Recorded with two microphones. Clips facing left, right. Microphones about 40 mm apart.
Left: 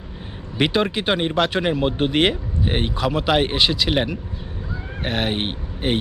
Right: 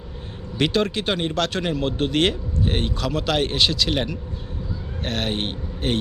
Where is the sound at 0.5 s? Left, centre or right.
Centre.